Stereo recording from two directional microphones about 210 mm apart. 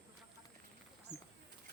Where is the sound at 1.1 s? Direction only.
20° right (ahead or behind).